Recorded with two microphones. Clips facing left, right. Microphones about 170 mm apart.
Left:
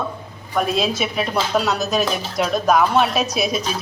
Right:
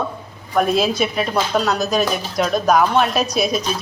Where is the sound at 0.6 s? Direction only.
Centre (ahead or behind).